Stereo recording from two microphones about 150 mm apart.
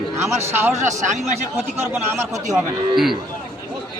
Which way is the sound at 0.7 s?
50° right (ahead or behind).